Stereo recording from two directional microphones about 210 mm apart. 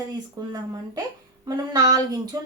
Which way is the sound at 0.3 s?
20° right (ahead or behind).